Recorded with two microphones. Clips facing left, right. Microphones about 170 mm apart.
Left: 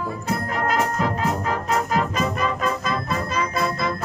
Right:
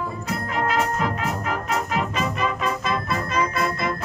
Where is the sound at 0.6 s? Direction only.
40° left (ahead or behind).